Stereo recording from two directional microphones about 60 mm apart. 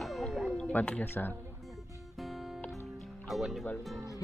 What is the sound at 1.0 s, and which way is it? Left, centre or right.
Speech, left.